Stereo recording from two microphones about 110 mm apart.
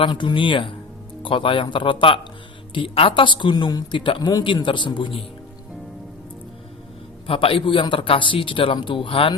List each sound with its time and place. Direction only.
0.0 s a man's voice: 45° left (ahead or behind)
7.3 s a man's voice: 55° left (ahead or behind)